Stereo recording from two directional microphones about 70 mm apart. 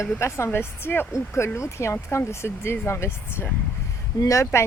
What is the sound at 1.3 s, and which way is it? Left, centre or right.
Speech, left.